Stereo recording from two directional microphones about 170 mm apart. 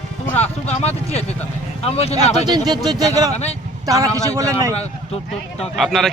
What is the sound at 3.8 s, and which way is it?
Speech, 20° right (ahead or behind).